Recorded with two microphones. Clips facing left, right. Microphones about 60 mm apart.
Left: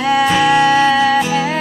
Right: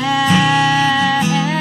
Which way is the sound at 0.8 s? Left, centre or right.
Left.